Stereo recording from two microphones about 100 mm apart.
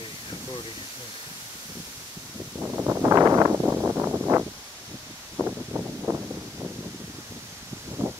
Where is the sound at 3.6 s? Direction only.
20° right (ahead or behind).